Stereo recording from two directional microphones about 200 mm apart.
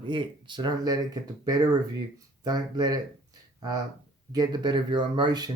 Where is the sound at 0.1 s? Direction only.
25° right (ahead or behind).